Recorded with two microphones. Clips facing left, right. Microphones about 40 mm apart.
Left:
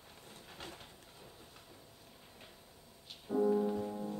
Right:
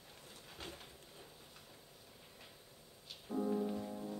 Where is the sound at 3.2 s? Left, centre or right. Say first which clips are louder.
Left 6 dB; centre.